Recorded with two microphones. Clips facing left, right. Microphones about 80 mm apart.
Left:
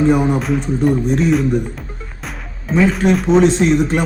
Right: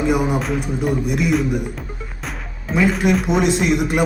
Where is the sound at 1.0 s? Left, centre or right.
Left.